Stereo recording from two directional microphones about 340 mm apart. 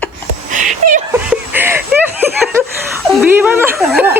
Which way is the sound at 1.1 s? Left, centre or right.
Centre.